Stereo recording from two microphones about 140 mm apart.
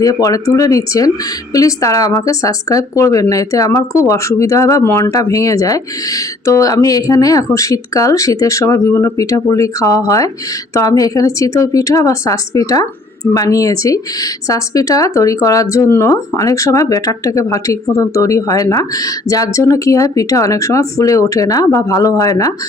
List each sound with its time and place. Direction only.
0.0 s speech: 25° left (ahead or behind)